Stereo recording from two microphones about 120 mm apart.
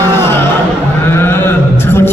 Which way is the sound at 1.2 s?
20° left (ahead or behind).